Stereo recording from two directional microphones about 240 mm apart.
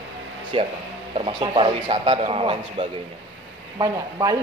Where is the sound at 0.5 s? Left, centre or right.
Right.